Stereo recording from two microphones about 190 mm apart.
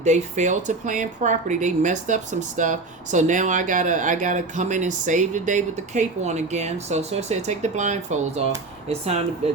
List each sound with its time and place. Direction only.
0.0 s speech: 40° right (ahead or behind)